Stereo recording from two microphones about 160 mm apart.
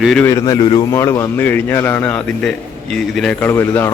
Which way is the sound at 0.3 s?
20° left (ahead or behind).